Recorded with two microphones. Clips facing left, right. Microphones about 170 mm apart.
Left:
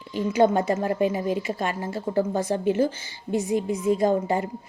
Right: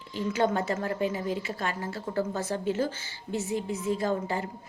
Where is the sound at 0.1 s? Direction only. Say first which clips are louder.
Left 6 dB; 15° left (ahead or behind).